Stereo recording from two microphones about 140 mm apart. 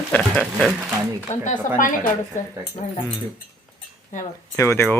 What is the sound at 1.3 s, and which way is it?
Speech, 65° left (ahead or behind).